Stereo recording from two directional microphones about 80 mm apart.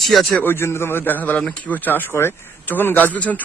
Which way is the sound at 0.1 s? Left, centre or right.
Centre.